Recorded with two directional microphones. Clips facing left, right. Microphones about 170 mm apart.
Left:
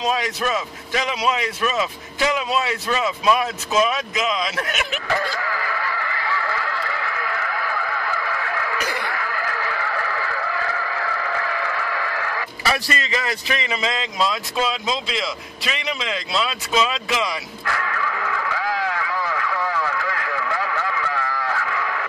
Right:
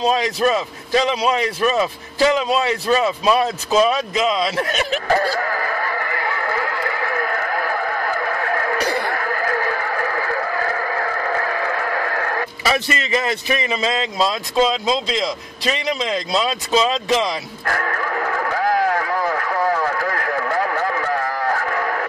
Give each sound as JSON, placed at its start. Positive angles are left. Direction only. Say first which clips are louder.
{"t": 0.0, "sound": "a man's voice", "louder": "right 5 dB", "side_deg": -30}
{"t": 5.0, "sound": "neigh", "louder": "right 6 dB", "side_deg": -40}
{"t": 12.6, "sound": "a man's voice", "louder": "right 2 dB", "side_deg": -20}
{"t": 13.1, "sound": "vehicle", "louder": "right 7 dB", "side_deg": -25}